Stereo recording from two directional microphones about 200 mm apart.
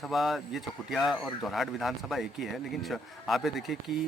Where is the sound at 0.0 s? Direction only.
Centre (ahead or behind).